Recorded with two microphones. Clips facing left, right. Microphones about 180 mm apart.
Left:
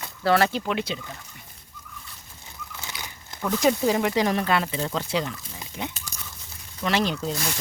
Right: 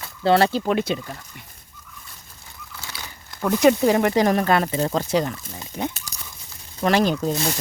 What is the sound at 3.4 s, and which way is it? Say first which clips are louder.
Speech: right 5 dB; 65° right (ahead or behind).